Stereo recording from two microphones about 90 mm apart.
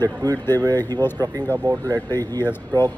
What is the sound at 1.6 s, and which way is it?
Speech, 35° right (ahead or behind).